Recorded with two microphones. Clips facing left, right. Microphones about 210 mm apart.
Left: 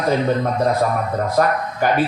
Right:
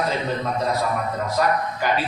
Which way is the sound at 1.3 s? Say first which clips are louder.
Left 2 dB; 50° left (ahead or behind).